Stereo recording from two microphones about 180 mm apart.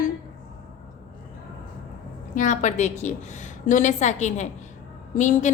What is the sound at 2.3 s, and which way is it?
A woman's voice, 45° left (ahead or behind).